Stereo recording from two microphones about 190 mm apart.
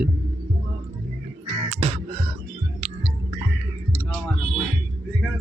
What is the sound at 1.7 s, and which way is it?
Music, 35° right (ahead or behind).